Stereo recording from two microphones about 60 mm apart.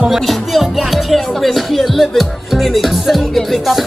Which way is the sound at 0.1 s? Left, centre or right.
Centre.